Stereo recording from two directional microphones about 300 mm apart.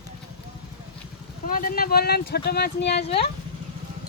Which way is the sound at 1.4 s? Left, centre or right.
Left.